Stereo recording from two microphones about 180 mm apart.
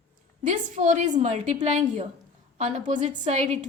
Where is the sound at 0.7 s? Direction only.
40° right (ahead or behind).